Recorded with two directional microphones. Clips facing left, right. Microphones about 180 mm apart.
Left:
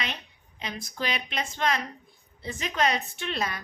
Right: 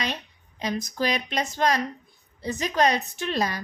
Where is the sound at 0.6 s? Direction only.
40° right (ahead or behind).